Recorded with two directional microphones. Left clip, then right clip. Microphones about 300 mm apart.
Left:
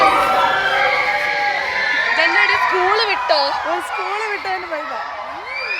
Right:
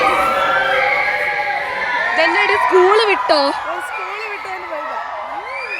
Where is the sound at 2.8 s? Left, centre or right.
Right.